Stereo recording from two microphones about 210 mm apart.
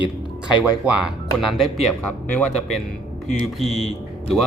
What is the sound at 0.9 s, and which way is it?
A man's voice, 5° right (ahead or behind).